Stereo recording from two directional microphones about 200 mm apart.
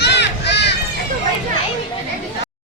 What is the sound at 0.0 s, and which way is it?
Run, 60° left (ahead or behind).